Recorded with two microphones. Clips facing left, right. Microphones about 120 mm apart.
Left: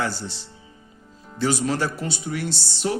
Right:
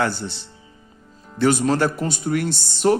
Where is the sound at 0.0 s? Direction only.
60° right (ahead or behind).